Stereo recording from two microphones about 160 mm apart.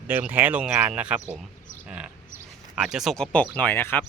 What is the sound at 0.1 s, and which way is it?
Speech, 10° right (ahead or behind).